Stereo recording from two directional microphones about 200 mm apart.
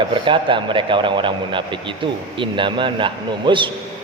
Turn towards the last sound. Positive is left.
turn(degrees=-25)  # may be behind; listen again after turning